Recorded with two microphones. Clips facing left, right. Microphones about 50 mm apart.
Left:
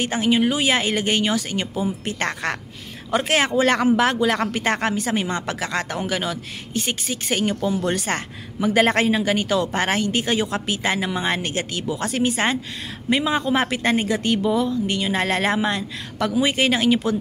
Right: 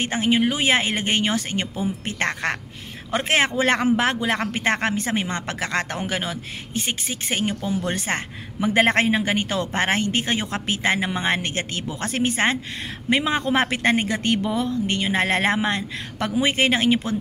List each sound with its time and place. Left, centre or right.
0.0 s speech: right